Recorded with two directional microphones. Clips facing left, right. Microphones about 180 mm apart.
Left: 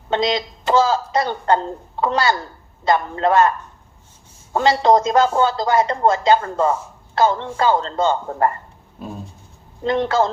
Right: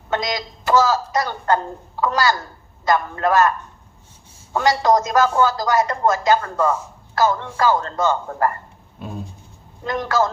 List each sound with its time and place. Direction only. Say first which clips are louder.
0.1 s a woman's voice: left 4 dB; 25° left (ahead or behind)
4.5 s a woman's voice: left 2 dB; 25° left (ahead or behind)
9.8 s a woman's voice: left 3 dB; 25° left (ahead or behind)